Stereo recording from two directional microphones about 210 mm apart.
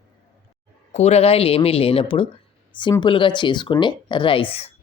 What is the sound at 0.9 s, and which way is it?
Speech, 30° left (ahead or behind).